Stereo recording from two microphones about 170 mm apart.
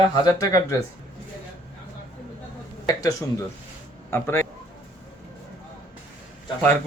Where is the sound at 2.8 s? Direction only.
20° left (ahead or behind).